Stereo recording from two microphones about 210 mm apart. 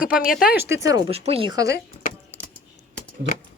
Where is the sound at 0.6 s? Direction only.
10° right (ahead or behind).